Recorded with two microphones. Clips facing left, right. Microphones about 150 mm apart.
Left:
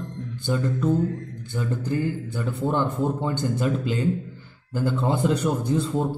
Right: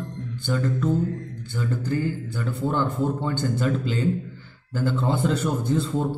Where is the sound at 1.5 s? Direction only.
20° left (ahead or behind).